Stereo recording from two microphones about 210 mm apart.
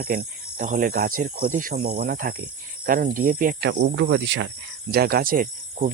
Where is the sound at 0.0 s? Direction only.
45° right (ahead or behind).